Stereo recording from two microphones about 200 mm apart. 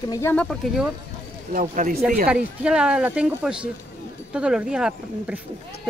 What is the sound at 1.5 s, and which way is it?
Speech, 40° right (ahead or behind).